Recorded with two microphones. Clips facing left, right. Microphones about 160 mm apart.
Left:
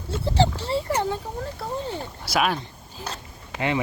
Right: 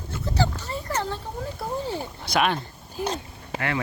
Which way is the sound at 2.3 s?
5° left (ahead or behind).